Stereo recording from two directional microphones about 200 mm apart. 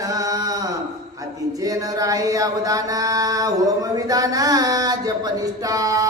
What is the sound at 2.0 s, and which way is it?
Chant, 15° right (ahead or behind).